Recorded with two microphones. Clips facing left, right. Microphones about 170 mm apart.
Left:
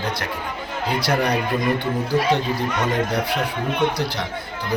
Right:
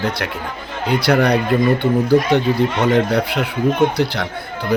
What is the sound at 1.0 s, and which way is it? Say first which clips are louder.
Speech: right 7 dB; 65° right (ahead or behind).